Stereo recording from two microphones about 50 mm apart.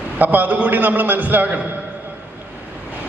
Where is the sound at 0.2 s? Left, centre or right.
Right.